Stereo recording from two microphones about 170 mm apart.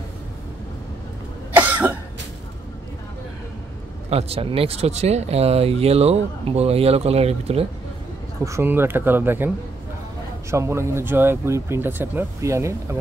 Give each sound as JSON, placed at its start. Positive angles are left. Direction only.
{"t": 1.5, "sound": "cough", "side_deg": -10}
{"t": 4.1, "sound": "speech", "side_deg": -35}
{"t": 8.5, "sound": "speech", "side_deg": -15}
{"t": 10.5, "sound": "speech", "side_deg": -15}